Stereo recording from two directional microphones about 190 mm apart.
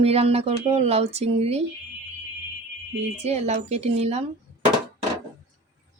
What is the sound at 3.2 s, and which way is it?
Speech, 35° right (ahead or behind).